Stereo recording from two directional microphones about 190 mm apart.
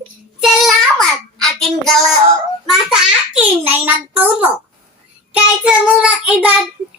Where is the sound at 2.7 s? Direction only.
5° right (ahead or behind).